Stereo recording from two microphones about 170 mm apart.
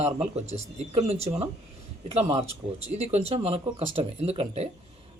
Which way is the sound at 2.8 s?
35° right (ahead or behind).